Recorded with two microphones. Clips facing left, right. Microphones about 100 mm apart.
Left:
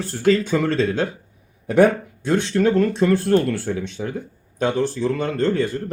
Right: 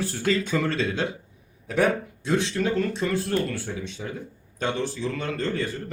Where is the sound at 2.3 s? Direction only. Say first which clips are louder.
Left 6 dB; centre (ahead or behind).